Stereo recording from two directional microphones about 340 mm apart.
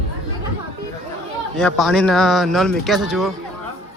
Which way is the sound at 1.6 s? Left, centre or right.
Centre.